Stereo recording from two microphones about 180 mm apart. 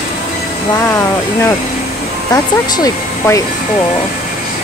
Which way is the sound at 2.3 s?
20° left (ahead or behind).